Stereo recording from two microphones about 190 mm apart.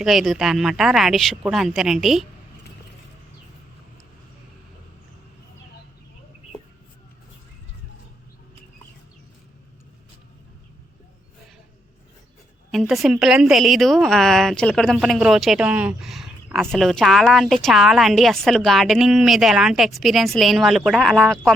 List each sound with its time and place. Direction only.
0.0 s a woman's voice: centre (ahead or behind)
12.7 s a woman's voice: centre (ahead or behind)